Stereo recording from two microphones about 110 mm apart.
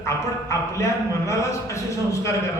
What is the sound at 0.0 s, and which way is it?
Speech, 25° left (ahead or behind).